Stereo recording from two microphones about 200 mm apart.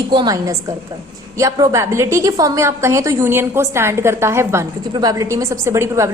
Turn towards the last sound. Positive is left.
turn(degrees=-15)  # may be behind; listen again after turning